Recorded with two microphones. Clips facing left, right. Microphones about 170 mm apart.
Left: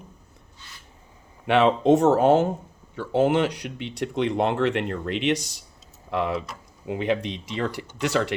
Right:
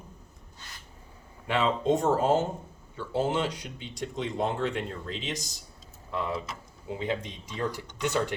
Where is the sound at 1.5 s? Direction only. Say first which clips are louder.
Left 8 dB; 70° left (ahead or behind).